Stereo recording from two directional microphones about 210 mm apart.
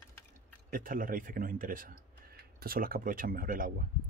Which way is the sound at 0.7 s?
40° right (ahead or behind).